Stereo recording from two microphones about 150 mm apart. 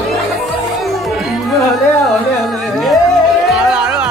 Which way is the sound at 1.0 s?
Centre (ahead or behind).